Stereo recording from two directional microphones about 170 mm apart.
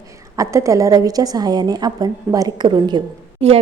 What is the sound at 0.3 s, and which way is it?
A woman's voice, 20° right (ahead or behind).